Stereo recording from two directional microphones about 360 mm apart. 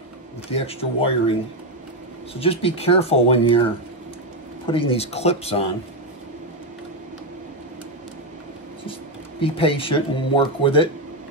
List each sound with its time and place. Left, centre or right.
0.5 s speech: centre
2.4 s speech: centre
4.6 s speech: centre
9.4 s speech: centre